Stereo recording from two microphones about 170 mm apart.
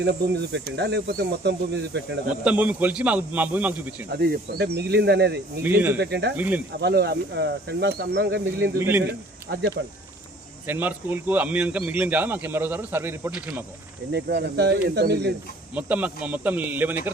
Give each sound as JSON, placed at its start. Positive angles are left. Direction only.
{"t": 0.0, "sound": "speech", "side_deg": -85}
{"t": 2.4, "sound": "speech", "side_deg": -10}
{"t": 4.1, "sound": "speech", "side_deg": -65}
{"t": 5.6, "sound": "speech", "side_deg": -10}
{"t": 6.0, "sound": "speech", "side_deg": -90}
{"t": 6.3, "sound": "speech", "side_deg": -10}
{"t": 6.8, "sound": "speech", "side_deg": -75}
{"t": 8.8, "sound": "speech", "side_deg": -10}
{"t": 9.5, "sound": "speech", "side_deg": -90}
{"t": 10.7, "sound": "speech", "side_deg": -10}
{"t": 14.1, "sound": "speech", "side_deg": -80}
{"t": 15.7, "sound": "speech", "side_deg": -10}